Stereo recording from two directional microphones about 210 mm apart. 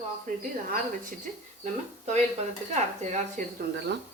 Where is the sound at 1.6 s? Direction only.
30° right (ahead or behind).